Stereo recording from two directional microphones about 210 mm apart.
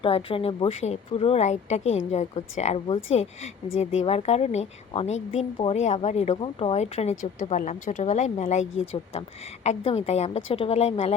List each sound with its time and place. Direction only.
0.0 s a woman's voice: 25° left (ahead or behind)